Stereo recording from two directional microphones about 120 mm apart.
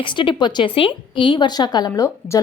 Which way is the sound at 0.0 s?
40° left (ahead or behind).